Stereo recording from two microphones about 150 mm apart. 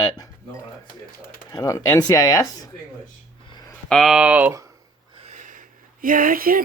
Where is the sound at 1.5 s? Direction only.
20° left (ahead or behind).